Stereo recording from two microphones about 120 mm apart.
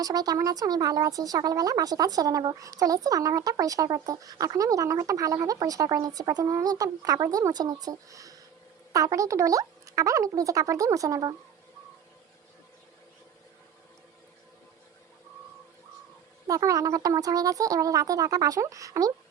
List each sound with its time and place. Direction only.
0.0 s speech: 30° right (ahead or behind)
16.5 s speech: 30° right (ahead or behind)